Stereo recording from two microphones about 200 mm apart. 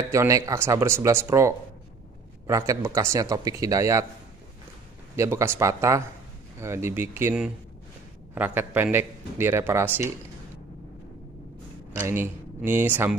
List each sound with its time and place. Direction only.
0.1 s a man's voice: 15° right (ahead or behind)
5.1 s a man's voice: 15° right (ahead or behind)
11.9 s speech: 10° right (ahead or behind)